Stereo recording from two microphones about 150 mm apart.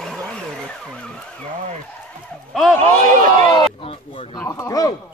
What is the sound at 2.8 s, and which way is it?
Speech, 60° right (ahead or behind).